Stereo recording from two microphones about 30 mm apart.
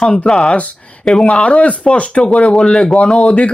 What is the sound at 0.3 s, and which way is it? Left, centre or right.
Speech, centre.